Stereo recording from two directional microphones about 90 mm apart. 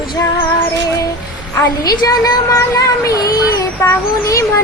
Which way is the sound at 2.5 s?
40° left (ahead or behind).